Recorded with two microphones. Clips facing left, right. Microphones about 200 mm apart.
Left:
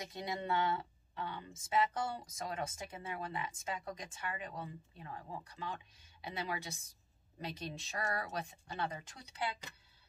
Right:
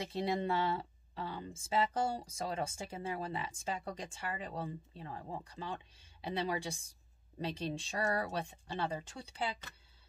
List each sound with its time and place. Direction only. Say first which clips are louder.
0.0 s speech: right 6 dB; 30° right (ahead or behind)